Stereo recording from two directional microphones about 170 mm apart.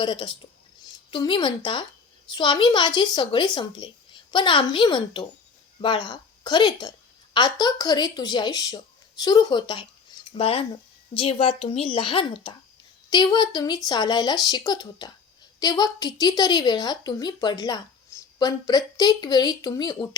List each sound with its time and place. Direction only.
0.0 s a woman's voice: 30° left (ahead or behind)